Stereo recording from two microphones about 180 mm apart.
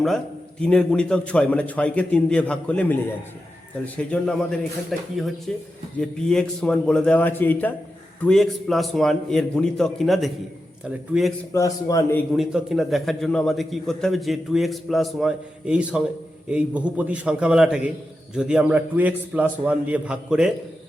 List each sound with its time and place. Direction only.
0.6 s a man's voice: 5° left (ahead or behind)
11.5 s a man's voice: 20° left (ahead or behind)
12.4 s a man's voice: 5° right (ahead or behind)